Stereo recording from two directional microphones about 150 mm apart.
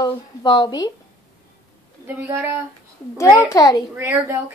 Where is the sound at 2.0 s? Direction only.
15° right (ahead or behind).